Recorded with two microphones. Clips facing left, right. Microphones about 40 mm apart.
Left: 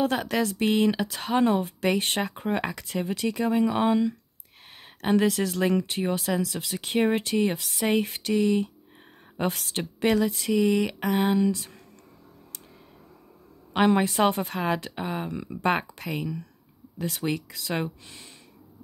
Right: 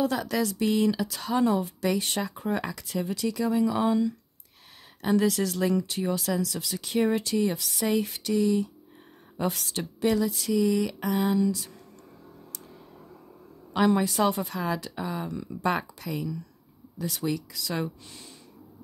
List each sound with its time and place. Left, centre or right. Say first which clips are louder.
0.0 s speech: left 1 dB; left
13.7 s speech: left 2 dB; left